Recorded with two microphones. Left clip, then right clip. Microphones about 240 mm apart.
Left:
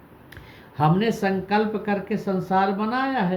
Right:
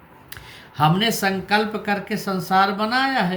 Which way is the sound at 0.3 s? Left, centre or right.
Right.